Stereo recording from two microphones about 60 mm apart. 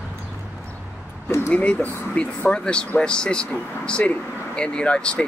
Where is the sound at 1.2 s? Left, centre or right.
Left.